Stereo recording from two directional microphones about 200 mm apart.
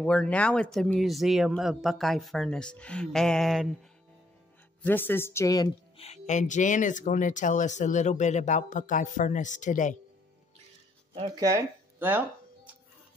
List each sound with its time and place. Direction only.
0.0 s speech: 5° left (ahead or behind)
4.8 s a woman's voice: 10° left (ahead or behind)
5.9 s speech: 30° left (ahead or behind)
11.3 s speech: 15° right (ahead or behind)